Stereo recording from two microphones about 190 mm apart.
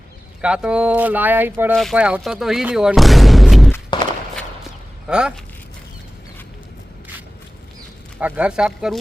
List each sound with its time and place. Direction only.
0.4 s speech: 5° right (ahead or behind)
3.9 s walk: 25° left (ahead or behind)
5.0 s speech: 5° right (ahead or behind)
8.2 s speech: 5° right (ahead or behind)